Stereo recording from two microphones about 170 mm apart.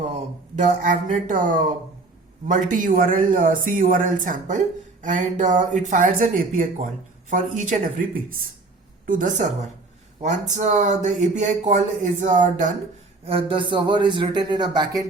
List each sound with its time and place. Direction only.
0.0 s speech: 45° right (ahead or behind)
13.2 s a man's voice: 30° right (ahead or behind)